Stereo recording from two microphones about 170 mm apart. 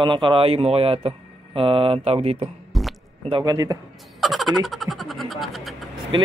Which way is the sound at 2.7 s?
Centre (ahead or behind).